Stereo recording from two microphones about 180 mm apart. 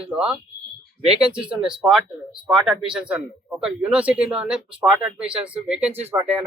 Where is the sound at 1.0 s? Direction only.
35° right (ahead or behind).